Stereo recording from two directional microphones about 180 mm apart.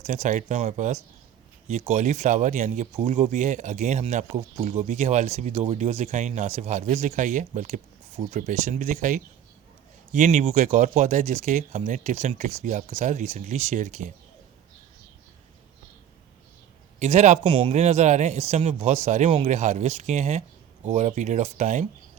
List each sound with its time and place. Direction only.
0.0 s speech: 40° right (ahead or behind)
17.0 s speech: 40° right (ahead or behind)
17.4 s speech: 25° right (ahead or behind)
17.7 s speech: 40° right (ahead or behind)